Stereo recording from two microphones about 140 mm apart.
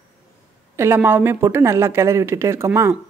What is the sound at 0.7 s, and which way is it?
A woman's voice, 15° right (ahead or behind).